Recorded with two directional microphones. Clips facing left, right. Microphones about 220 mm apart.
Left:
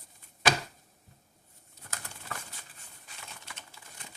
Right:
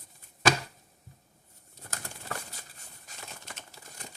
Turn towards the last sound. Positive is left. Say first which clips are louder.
# right 3 dB
turn(degrees=-40)  # may be behind; listen again after turning